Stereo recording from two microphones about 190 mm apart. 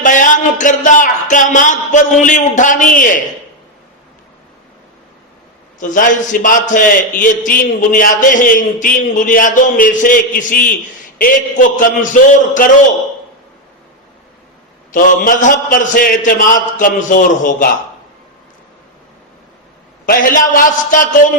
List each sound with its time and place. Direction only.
0.0 s speech: 45° left (ahead or behind)
5.8 s a man's voice: 45° left (ahead or behind)
14.9 s a man's voice: 45° left (ahead or behind)
20.1 s a man's voice: 45° left (ahead or behind)